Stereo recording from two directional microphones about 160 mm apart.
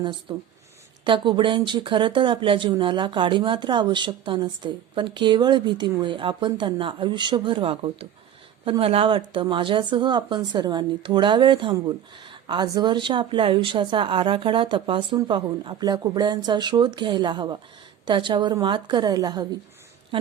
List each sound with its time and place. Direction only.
0.0 s speech: 30° right (ahead or behind)